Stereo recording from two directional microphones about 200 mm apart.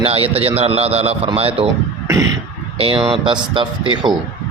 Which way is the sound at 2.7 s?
25° right (ahead or behind).